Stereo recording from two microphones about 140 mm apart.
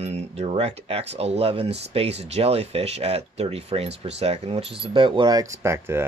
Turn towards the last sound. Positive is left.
turn(degrees=-20)  # may be behind; listen again after turning